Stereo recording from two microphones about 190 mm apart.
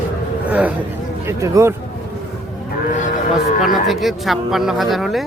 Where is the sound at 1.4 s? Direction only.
15° right (ahead or behind).